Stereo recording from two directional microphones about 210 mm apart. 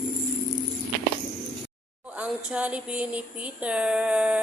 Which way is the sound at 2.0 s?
5° right (ahead or behind).